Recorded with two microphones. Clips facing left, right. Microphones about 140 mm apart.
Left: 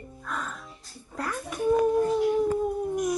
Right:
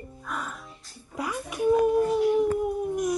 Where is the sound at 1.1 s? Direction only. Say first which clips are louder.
Right 1 dB; 10° right (ahead or behind).